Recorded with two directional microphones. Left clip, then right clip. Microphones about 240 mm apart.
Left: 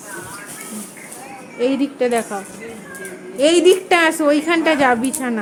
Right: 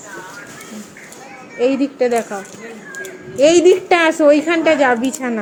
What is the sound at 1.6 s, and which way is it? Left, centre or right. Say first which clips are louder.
Speech: right 3 dB; centre.